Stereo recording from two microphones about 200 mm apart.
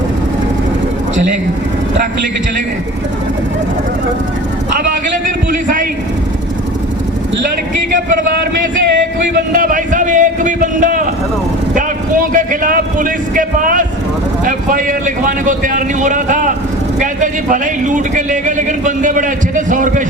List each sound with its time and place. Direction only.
8.1 s a man's voice: 50° right (ahead or behind)
9.5 s a man's voice: 45° right (ahead or behind)